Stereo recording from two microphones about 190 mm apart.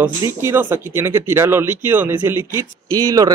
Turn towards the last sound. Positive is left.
turn(degrees=-20)  # may be behind; listen again after turning